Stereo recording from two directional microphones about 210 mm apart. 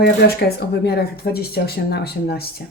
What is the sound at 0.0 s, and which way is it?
Speech, 50° left (ahead or behind).